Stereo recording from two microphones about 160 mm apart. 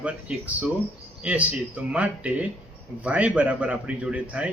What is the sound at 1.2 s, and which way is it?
A man's voice, 10° right (ahead or behind).